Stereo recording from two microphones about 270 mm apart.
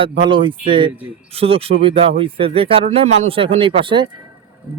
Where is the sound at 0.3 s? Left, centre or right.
Centre.